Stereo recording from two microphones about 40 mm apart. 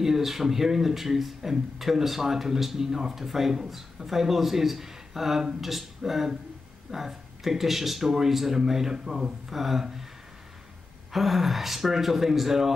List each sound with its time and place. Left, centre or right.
0.0 s a man's voice: centre
11.1 s speech: centre